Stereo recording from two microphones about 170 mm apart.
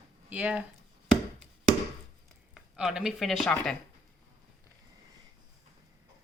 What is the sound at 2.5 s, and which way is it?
Speech, 5° right (ahead or behind).